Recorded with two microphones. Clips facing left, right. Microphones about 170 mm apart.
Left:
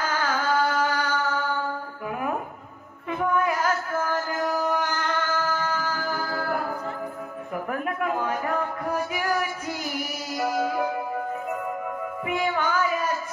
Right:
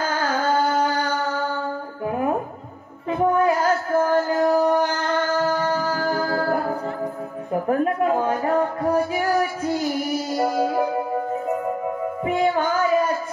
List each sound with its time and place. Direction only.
0.5 s a sound: 30° right (ahead or behind)
2.0 s music: 35° right (ahead or behind)
7.5 s speech: 35° right (ahead or behind)
10.3 s music: 30° right (ahead or behind)
12.3 s music: 35° right (ahead or behind)